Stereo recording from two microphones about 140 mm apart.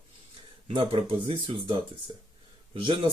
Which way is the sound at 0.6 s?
40° right (ahead or behind).